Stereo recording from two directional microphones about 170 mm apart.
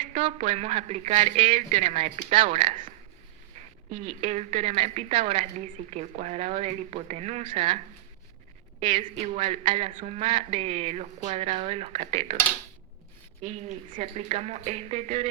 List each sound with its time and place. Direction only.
0.2 s a woman's voice: 30° right (ahead or behind)
2.3 s speech: 30° right (ahead or behind)
3.8 s a woman's voice: 40° right (ahead or behind)
9.0 s a woman's voice: 40° right (ahead or behind)
13.4 s a woman's voice: 40° right (ahead or behind)